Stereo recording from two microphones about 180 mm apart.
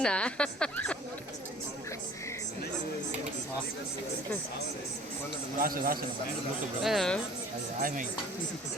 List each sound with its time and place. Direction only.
0.0 s speech: 5° left (ahead or behind)
5.5 s a man's voice: 50° right (ahead or behind)
6.8 s speech: centre (ahead or behind)
7.8 s a man's voice: 50° right (ahead or behind)